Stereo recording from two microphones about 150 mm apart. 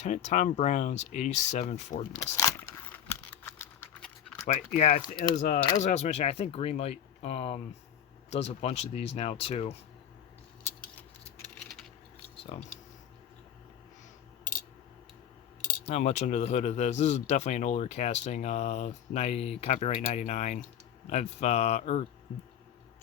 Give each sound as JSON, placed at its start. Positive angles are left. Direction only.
{"t": 0.0, "sound": "speech", "side_deg": 50}
{"t": 2.3, "sound": "a sound", "side_deg": 20}
{"t": 4.4, "sound": "speech", "side_deg": 50}
{"t": 11.5, "sound": "keys jangling", "side_deg": 5}
{"t": 12.4, "sound": "a sound", "side_deg": 40}
{"t": 15.9, "sound": "speech", "side_deg": 50}